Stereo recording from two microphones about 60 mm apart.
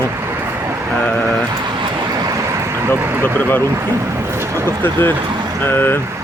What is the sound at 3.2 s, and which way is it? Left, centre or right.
Speech, left.